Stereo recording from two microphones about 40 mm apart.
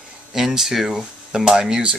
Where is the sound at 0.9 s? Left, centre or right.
Centre.